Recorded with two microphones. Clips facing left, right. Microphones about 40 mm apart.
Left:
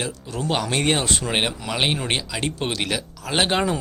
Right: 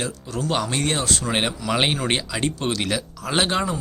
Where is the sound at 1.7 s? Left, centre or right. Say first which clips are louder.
Right 3 dB; centre.